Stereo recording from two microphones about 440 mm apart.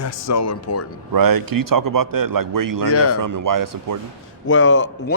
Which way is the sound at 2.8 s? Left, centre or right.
Left.